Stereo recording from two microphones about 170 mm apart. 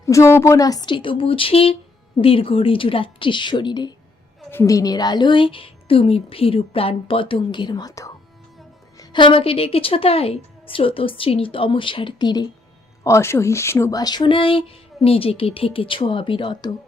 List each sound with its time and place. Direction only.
0.0 s a woman's voice: 15° left (ahead or behind)